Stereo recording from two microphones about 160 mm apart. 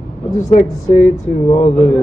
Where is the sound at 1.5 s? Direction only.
40° left (ahead or behind).